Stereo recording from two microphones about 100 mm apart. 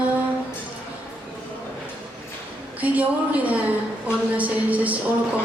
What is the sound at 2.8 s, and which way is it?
Speech, 15° right (ahead or behind).